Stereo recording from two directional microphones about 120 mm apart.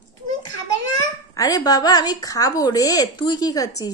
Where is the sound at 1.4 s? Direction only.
30° left (ahead or behind).